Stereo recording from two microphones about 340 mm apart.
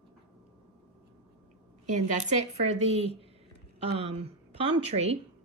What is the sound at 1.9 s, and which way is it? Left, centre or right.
A woman's voice, centre.